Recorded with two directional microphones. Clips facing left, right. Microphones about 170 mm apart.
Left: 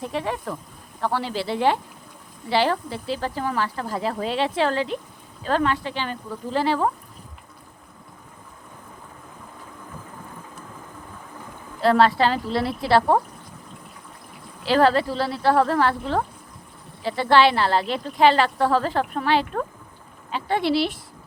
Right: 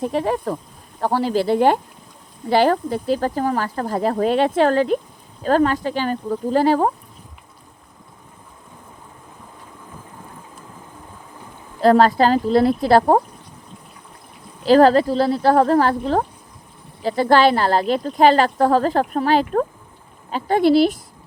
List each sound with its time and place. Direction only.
0.0 s speech: 40° right (ahead or behind)
11.8 s speech: 45° right (ahead or behind)
14.6 s speech: 40° right (ahead or behind)